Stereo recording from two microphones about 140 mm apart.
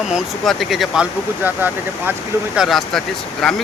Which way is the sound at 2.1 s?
5° right (ahead or behind).